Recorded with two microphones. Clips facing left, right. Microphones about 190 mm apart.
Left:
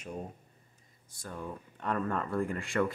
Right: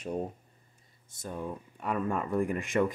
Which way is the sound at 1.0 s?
20° right (ahead or behind).